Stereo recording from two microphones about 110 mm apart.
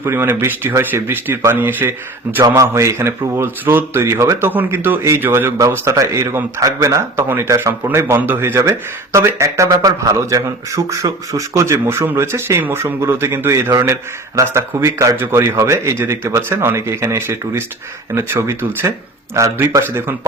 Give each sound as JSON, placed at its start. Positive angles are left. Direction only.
{"t": 0.0, "sound": "speech", "side_deg": -20}